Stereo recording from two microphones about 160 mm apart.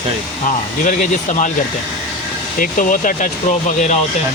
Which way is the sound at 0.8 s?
55° left (ahead or behind).